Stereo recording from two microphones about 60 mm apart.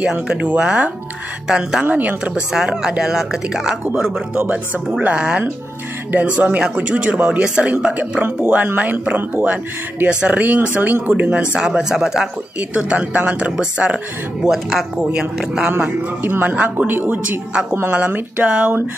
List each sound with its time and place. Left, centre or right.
0.0 s speech: centre
1.9 s speech: right
2.3 s speech: centre
8.2 s speech: right
11.5 s speech: centre
12.5 s speech: right
14.4 s speech: centre
16.2 s speech: right